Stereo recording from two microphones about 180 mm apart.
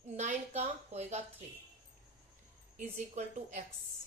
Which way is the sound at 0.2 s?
40° right (ahead or behind).